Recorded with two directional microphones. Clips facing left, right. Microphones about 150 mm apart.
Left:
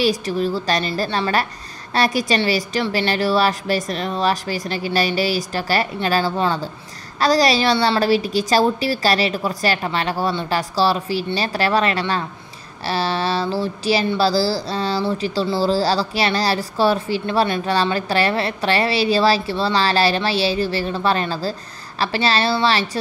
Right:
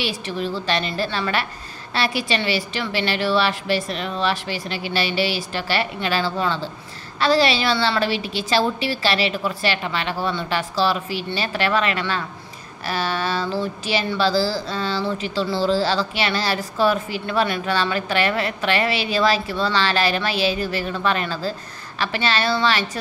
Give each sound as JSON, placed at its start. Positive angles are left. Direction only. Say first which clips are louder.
{"t": 0.0, "sound": "speech", "louder": "left 6 dB", "side_deg": 40}